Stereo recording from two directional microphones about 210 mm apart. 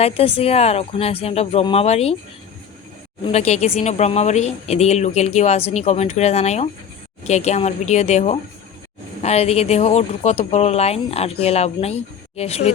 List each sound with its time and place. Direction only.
0.0 s speech: 30° left (ahead or behind)
3.2 s a woman's voice: 30° left (ahead or behind)